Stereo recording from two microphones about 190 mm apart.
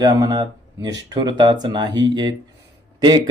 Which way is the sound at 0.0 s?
20° right (ahead or behind).